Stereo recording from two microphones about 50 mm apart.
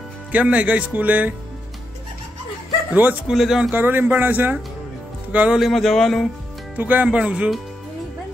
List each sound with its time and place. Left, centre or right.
0.3 s speech: right
2.9 s speech: right
3.3 s speech: centre
3.7 s speech: right
5.3 s speech: right
5.7 s speech: centre
6.8 s speech: right
7.1 s speech: right